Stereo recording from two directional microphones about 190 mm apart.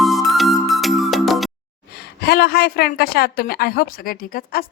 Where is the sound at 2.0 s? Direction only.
55° left (ahead or behind).